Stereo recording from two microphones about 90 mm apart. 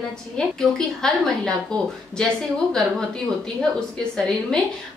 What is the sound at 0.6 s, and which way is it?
A woman's voice, 5° left (ahead or behind).